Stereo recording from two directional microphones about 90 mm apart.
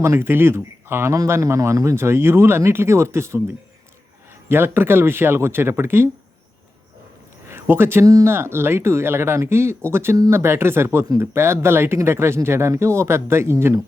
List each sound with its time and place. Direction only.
0.0 s speech: 30° right (ahead or behind)
1.1 s speech: 40° right (ahead or behind)
4.4 s speech: 25° right (ahead or behind)
7.4 s a sound: 25° right (ahead or behind)
8.0 s speech: 40° right (ahead or behind)
8.3 s speech: 30° right (ahead or behind)